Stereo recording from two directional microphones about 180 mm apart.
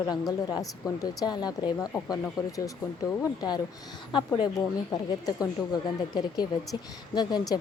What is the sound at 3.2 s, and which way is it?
Speech, 20° left (ahead or behind).